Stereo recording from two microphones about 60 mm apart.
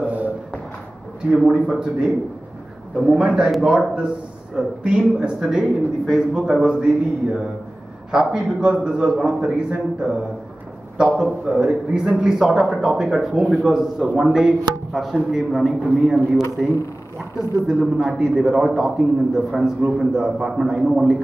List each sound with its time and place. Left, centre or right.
0.0 s a sound: right
1.4 s speech: centre
3.1 s speech: centre